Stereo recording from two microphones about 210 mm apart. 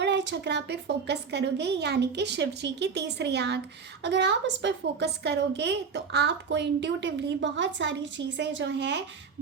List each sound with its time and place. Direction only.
0.0 s a woman's voice: 55° right (ahead or behind)